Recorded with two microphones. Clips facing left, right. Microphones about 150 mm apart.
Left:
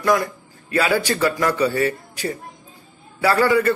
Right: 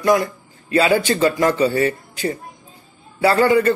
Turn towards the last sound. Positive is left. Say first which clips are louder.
# right 2 dB
turn(degrees=-25)  # may be behind; listen again after turning